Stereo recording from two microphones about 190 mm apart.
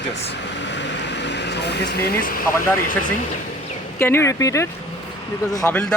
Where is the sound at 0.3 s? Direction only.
65° left (ahead or behind); by 2.4 s 50° left (ahead or behind).